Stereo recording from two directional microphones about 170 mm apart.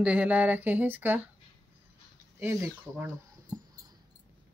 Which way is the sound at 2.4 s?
15° right (ahead or behind).